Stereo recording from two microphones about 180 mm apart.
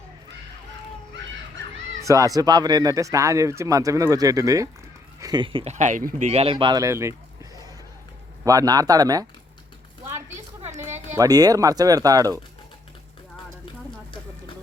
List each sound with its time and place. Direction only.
2.0 s speech: 20° right (ahead or behind)
5.7 s speech: 45° right (ahead or behind); by 7.1 s 15° right (ahead or behind)
8.4 s speech: 20° right (ahead or behind)
11.2 s speech: 20° right (ahead or behind)